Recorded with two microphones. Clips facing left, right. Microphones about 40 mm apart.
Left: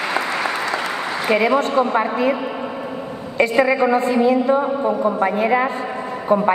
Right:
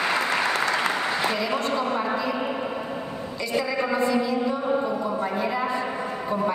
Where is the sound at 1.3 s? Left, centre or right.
Left.